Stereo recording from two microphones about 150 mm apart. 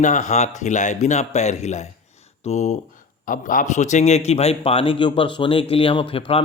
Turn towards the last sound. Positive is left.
turn(degrees=35)  # may be behind; listen again after turning